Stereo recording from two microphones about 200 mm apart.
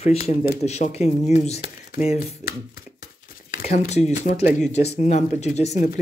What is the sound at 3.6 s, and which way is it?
Speech, 35° left (ahead or behind).